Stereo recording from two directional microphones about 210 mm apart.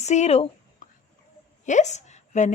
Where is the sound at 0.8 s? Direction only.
40° left (ahead or behind).